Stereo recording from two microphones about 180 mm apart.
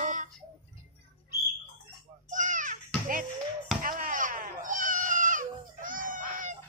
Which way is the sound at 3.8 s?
50° right (ahead or behind).